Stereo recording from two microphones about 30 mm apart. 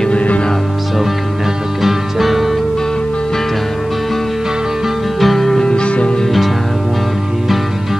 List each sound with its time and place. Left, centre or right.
0.1 s music: left
1.8 s music: centre
5.2 s music: centre
5.8 s music: left
6.2 s music: centre